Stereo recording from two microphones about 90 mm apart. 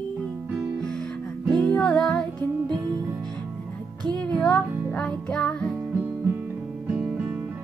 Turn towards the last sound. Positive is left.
turn(degrees=-10)  # may be behind; listen again after turning